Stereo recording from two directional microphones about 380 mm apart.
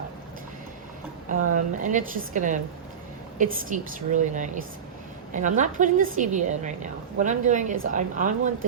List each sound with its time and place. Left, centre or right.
1.5 s a woman's voice: centre